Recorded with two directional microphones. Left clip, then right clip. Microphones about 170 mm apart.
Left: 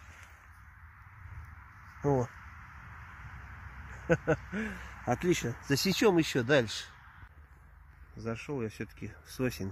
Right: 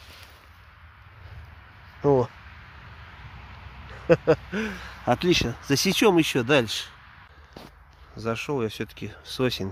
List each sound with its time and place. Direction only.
2.0 s a sound: 30° right (ahead or behind)
4.3 s speech: 25° right (ahead or behind)
5.6 s speech: 10° right (ahead or behind)
8.2 s speech: 20° right (ahead or behind)